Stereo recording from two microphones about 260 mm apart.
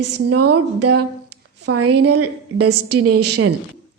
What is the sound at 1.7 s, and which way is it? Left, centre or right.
A woman's voice, right.